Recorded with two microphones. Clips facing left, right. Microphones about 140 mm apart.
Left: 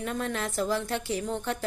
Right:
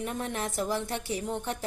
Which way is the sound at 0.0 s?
20° right (ahead or behind).